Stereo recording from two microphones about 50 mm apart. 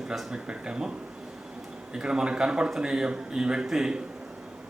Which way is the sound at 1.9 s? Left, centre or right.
Centre.